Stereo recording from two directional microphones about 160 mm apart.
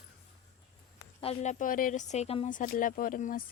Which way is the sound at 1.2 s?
40° left (ahead or behind).